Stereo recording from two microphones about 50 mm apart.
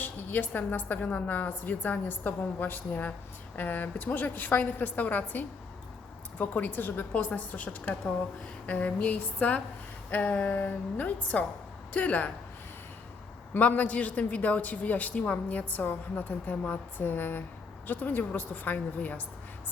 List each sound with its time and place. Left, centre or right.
0.0 s speech: left
6.4 s speech: left
7.1 s speech: left
13.6 s speech: left